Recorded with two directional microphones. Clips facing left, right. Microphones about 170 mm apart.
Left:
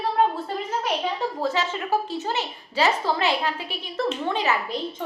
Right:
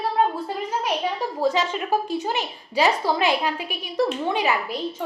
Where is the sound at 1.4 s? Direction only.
15° right (ahead or behind).